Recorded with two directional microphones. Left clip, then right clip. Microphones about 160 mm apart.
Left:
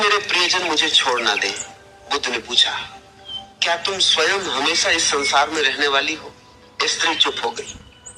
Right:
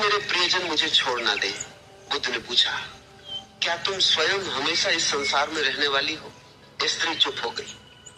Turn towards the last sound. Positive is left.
turn(degrees=35)  # may be behind; listen again after turning